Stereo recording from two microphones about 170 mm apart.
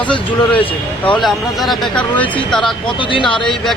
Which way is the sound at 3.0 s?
30° left (ahead or behind).